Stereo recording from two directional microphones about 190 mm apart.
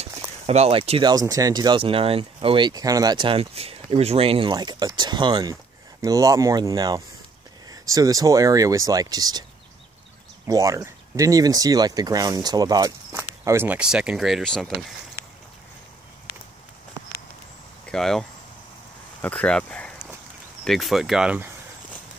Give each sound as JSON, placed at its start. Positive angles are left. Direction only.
{"t": 0.5, "sound": "speech", "side_deg": -30}
{"t": 10.4, "sound": "speech", "side_deg": -15}
{"t": 17.8, "sound": "speech", "side_deg": 0}
{"t": 19.2, "sound": "speech", "side_deg": 5}